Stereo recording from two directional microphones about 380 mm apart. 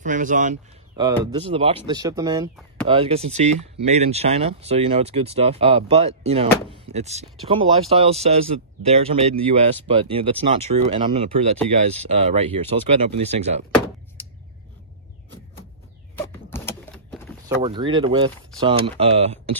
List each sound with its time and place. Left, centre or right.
0.0 s speech: centre
16.2 s a sound: centre
17.6 s speech: centre